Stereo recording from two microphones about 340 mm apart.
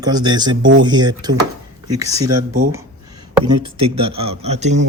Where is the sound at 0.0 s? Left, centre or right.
Centre.